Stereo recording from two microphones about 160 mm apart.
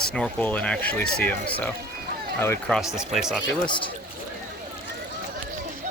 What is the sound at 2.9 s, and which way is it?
Speech, 5° right (ahead or behind).